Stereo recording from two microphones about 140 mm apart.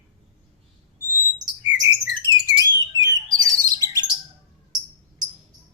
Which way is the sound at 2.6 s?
30° right (ahead or behind).